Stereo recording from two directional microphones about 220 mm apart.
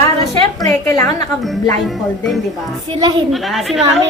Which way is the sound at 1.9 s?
Centre (ahead or behind).